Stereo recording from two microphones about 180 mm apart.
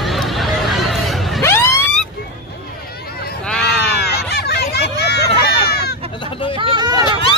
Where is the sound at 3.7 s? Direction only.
65° left (ahead or behind).